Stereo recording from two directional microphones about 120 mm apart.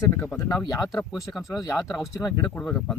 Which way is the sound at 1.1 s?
Centre (ahead or behind).